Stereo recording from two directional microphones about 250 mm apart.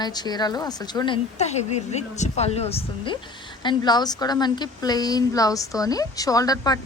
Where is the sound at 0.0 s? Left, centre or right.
Centre.